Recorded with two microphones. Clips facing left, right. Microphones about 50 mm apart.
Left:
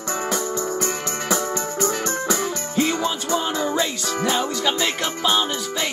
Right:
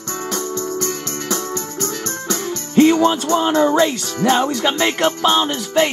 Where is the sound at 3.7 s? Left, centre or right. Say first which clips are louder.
Right 6 dB; right.